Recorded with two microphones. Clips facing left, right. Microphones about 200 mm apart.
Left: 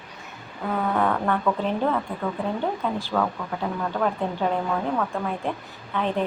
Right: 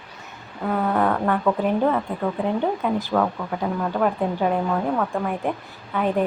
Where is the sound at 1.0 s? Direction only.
10° right (ahead or behind).